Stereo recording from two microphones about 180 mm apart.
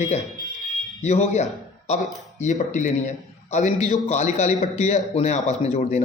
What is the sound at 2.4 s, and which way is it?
A man's voice, 40° left (ahead or behind).